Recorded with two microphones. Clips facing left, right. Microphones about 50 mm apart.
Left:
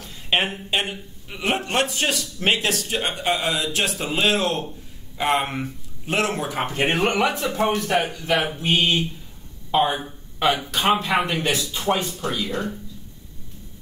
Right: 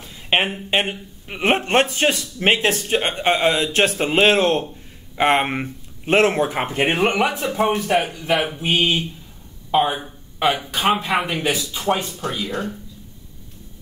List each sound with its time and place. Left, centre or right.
0.0 s speech: right
7.1 s speech: centre
12.3 s speech: right